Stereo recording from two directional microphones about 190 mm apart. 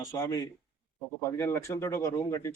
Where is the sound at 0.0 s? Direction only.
15° left (ahead or behind).